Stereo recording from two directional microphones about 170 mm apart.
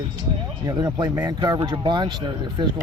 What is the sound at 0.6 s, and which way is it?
Speech, 20° right (ahead or behind).